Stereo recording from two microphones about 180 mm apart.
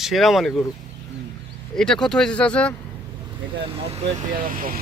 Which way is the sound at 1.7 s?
5° left (ahead or behind).